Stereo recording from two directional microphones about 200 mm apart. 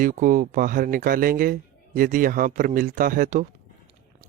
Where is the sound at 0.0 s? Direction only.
40° right (ahead or behind).